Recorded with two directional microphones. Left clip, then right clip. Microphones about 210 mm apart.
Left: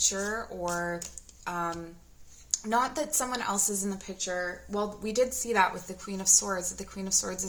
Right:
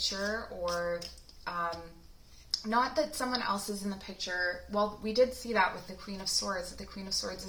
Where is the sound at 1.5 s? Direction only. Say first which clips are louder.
Left 2 dB; 50° left (ahead or behind).